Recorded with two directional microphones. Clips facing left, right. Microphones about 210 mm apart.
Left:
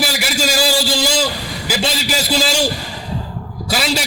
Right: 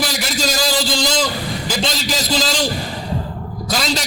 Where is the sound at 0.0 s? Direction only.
10° left (ahead or behind).